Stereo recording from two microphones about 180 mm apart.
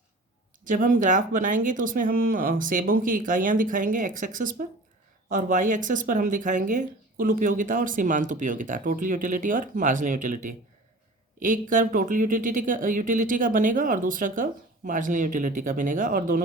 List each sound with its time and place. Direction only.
0.6 s speech: 45° right (ahead or behind)